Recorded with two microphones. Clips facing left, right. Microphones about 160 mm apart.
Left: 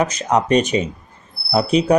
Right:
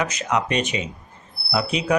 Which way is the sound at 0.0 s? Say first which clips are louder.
Left 5 dB; 35° left (ahead or behind).